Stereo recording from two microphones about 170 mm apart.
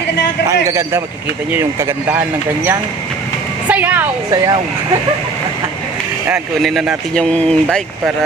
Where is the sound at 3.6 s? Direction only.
10° right (ahead or behind).